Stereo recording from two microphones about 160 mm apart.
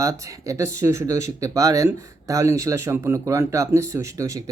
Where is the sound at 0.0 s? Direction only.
20° right (ahead or behind).